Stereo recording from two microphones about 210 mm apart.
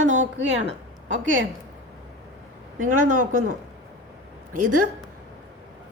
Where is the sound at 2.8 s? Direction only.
40° right (ahead or behind).